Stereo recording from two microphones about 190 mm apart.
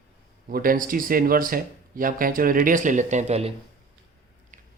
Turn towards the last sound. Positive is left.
turn(degrees=-35)  # may be behind; listen again after turning